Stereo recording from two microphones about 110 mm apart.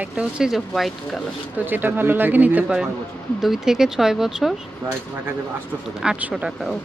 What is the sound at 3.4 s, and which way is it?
Speech, 5° right (ahead or behind).